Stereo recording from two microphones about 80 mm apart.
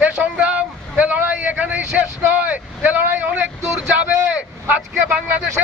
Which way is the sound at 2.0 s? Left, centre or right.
Centre.